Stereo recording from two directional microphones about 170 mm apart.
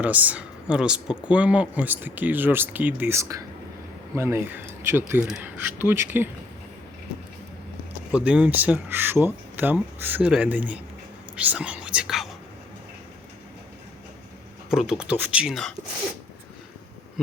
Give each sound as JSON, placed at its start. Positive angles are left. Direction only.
{"t": 0.0, "sound": "speech", "side_deg": -10}
{"t": 8.1, "sound": "speech", "side_deg": -5}
{"t": 14.7, "sound": "speech", "side_deg": -5}